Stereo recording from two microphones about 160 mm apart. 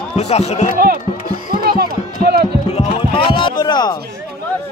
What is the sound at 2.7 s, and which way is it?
Speech, 35° left (ahead or behind).